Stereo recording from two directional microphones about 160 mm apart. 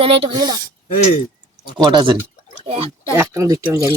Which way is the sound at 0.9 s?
50° left (ahead or behind).